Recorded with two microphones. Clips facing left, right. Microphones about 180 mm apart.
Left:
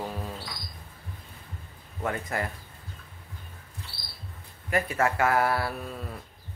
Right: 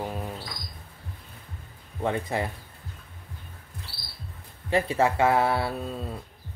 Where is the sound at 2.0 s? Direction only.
25° right (ahead or behind).